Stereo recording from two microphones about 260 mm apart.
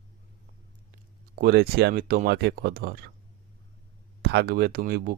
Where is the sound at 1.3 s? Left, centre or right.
Right.